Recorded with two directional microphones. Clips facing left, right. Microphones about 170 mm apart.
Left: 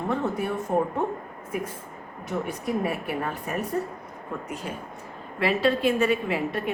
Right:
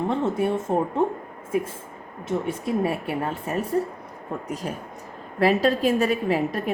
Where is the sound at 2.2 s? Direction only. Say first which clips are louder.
Right 3 dB; 25° right (ahead or behind).